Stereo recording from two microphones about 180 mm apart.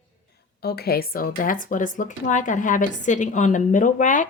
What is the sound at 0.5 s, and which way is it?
Speech, 65° left (ahead or behind).